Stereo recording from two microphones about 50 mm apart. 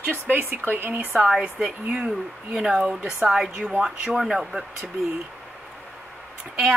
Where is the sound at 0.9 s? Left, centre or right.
Right.